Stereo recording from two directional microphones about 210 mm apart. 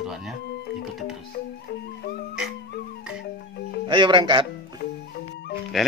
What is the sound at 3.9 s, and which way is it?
Speech, 25° right (ahead or behind).